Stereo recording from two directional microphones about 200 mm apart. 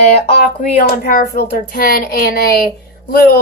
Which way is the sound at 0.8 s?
45° left (ahead or behind).